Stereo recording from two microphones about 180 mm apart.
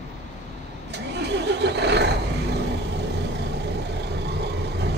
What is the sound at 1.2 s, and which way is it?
Vehicle, 70° right (ahead or behind).